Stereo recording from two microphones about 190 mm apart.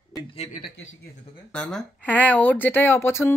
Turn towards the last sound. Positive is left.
turn(degrees=10)  # may be behind; listen again after turning